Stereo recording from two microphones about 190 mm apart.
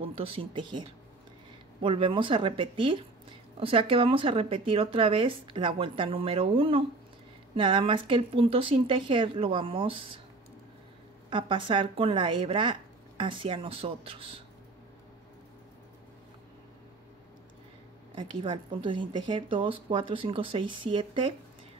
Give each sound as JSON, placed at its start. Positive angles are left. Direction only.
{"t": 0.0, "sound": "speech", "side_deg": -30}
{"t": 11.2, "sound": "speech", "side_deg": -25}
{"t": 18.1, "sound": "speech", "side_deg": -25}